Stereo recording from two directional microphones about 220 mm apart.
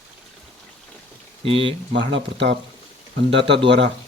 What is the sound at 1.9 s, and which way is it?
Speech, 55° right (ahead or behind).